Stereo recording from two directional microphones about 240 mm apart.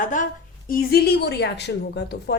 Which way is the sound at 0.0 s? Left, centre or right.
Left.